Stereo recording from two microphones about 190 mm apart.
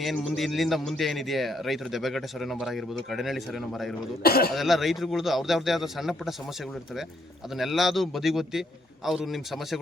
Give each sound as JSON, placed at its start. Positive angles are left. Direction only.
{"t": 0.0, "sound": "speech", "side_deg": 0}
{"t": 4.2, "sound": "speech", "side_deg": 55}
{"t": 4.5, "sound": "speech", "side_deg": 0}
{"t": 7.5, "sound": "speech", "side_deg": 0}